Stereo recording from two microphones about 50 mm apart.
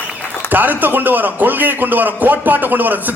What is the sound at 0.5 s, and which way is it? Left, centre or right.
A man's voice, right.